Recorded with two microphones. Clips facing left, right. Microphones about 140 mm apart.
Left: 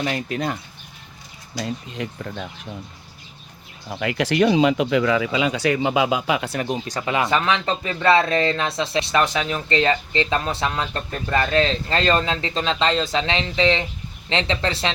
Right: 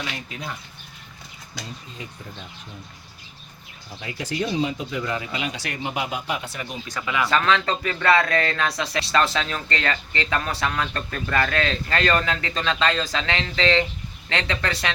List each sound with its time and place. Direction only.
0.0 s speech: 55° left (ahead or behind)
1.6 s speech: 70° left (ahead or behind)
3.8 s speech: 75° left (ahead or behind); by 6.6 s 90° left
6.6 s speech: 40° left (ahead or behind)
7.2 s speech: 20° left (ahead or behind)